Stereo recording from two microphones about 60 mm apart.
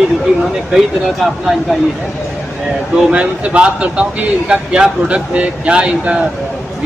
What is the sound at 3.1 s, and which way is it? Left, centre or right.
Speech, right.